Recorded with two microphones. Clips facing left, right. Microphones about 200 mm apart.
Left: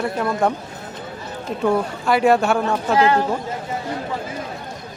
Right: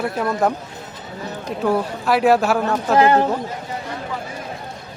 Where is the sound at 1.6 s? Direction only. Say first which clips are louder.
Even; centre (ahead or behind).